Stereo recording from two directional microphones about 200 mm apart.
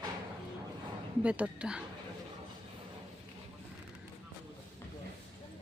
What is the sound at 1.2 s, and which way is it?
Speech, 5° right (ahead or behind).